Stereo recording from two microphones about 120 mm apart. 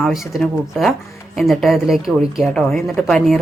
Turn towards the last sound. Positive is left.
turn(degrees=0)  # may be behind; listen again after turning